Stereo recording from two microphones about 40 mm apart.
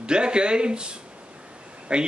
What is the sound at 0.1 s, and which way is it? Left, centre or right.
Speech, right.